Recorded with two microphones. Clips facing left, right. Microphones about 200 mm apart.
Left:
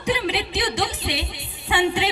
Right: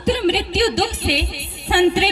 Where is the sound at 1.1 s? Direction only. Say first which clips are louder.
Right 6 dB; 70° right (ahead or behind).